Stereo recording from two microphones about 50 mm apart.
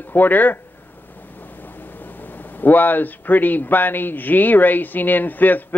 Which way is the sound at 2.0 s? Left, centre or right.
Left.